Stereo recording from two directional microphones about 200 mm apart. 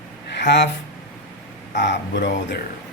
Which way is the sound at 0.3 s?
60° left (ahead or behind).